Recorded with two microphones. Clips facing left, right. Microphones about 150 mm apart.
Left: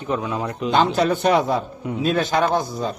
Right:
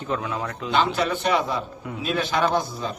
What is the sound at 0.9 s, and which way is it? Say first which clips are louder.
A man's voice: left 5 dB; 40° left (ahead or behind).